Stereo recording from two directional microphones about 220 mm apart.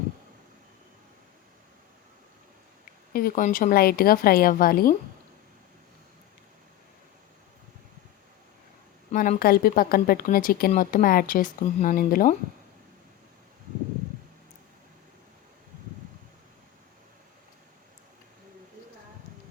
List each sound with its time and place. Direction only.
3.1 s speech: 40° left (ahead or behind)
9.1 s speech: 40° left (ahead or behind)